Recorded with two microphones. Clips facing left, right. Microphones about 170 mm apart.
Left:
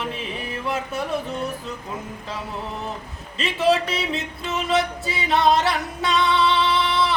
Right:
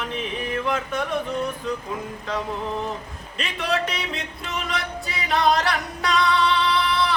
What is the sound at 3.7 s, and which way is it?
Music, 25° left (ahead or behind).